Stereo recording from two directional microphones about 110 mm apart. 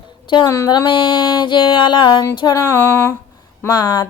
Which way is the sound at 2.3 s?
40° left (ahead or behind).